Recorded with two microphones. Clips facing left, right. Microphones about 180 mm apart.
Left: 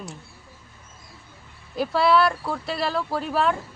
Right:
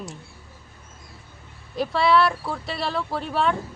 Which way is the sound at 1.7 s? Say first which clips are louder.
Even; centre (ahead or behind).